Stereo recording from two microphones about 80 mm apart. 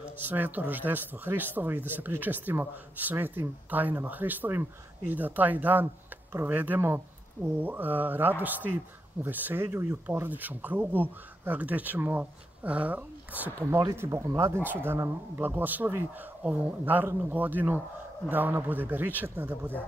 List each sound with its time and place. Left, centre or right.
0.2 s speech: right
13.6 s speech: right